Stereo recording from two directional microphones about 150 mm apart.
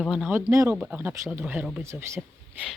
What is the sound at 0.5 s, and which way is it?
Speech, 20° right (ahead or behind).